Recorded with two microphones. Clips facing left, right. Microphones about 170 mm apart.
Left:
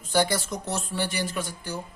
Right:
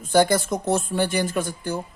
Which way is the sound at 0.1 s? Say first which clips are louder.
Right 6 dB; 50° right (ahead or behind).